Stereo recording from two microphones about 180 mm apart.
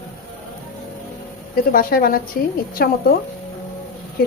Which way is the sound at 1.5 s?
55° left (ahead or behind).